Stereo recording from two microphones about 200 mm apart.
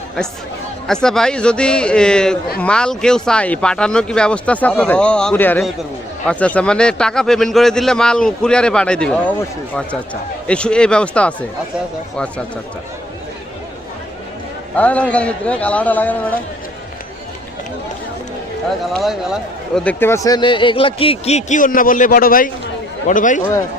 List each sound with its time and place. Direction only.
0.9 s speech: 5° left (ahead or behind)
10.4 s speech: 5° left (ahead or behind)
14.8 s a man's voice: 5° left (ahead or behind)
18.9 s a man's voice: centre (ahead or behind); by 23.4 s 40° left (ahead or behind)